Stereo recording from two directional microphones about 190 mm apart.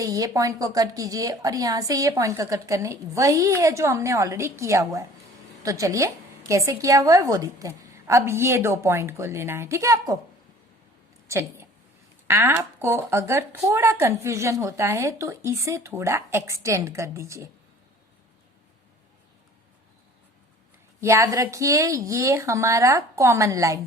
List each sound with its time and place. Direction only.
0.0 s speech: 20° right (ahead or behind)
11.3 s a sound: 15° right (ahead or behind)
12.3 s speech: 10° right (ahead or behind)
21.0 s speech: 15° right (ahead or behind)